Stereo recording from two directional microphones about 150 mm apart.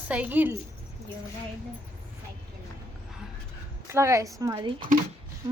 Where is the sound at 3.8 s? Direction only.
20° right (ahead or behind).